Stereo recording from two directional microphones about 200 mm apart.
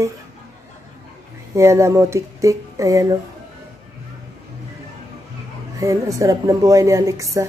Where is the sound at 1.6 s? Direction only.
15° right (ahead or behind).